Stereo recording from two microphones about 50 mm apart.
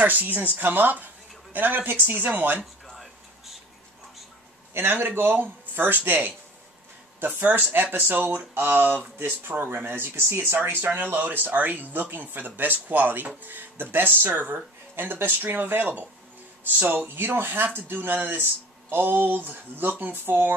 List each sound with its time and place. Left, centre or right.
0.0 s a woman's voice: right
2.9 s music: centre
4.7 s speech: right